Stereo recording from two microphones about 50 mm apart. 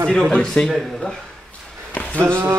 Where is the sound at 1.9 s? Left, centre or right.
Left.